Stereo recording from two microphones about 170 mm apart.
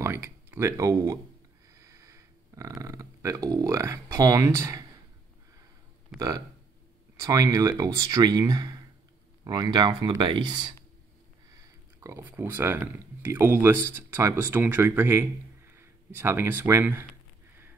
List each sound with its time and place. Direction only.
0.0 s speech: 15° right (ahead or behind)
1.7 s a sound: 15° right (ahead or behind)
2.8 s speech: 15° right (ahead or behind)
6.1 s speech: 20° right (ahead or behind)
11.5 s speech: 15° right (ahead or behind)